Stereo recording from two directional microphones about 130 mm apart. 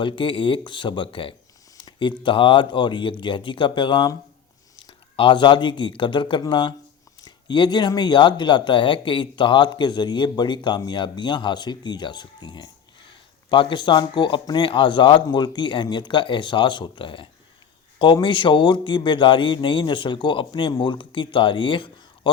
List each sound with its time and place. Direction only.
0.0 s speech: 40° left (ahead or behind)
1.8 s a sound: 40° left (ahead or behind)
2.2 s speech: 40° left (ahead or behind)